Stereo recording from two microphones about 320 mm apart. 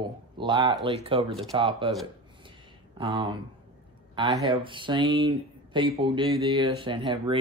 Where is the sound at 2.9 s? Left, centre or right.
Centre.